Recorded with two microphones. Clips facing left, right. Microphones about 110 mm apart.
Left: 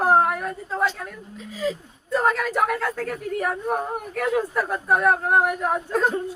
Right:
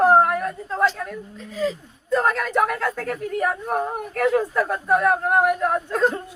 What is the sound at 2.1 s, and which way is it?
Speech, centre (ahead or behind).